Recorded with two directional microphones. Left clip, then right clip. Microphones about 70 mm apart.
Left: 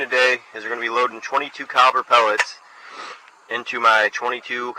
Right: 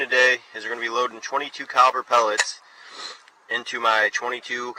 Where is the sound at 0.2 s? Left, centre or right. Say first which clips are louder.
Left 1 dB; right.